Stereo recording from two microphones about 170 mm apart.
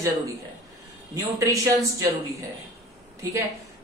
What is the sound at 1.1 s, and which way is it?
Speech, 20° right (ahead or behind).